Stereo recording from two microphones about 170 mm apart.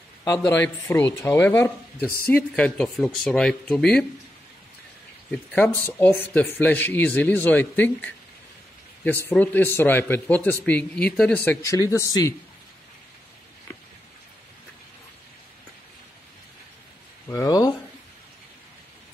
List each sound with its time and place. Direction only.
0.5 s speech: 15° left (ahead or behind)
5.3 s speech: 10° left (ahead or behind)
9.3 s speech: 10° left (ahead or behind)
17.3 s a sound: 20° left (ahead or behind)